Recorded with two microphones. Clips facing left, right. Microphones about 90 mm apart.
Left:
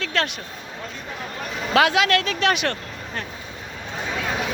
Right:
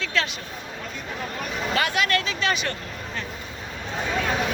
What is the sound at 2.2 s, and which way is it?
Speech, 65° left (ahead or behind).